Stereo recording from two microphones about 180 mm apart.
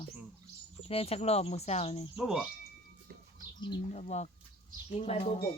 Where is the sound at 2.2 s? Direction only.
5° right (ahead or behind).